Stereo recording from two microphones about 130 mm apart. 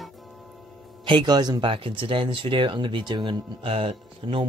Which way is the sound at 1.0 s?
35° right (ahead or behind).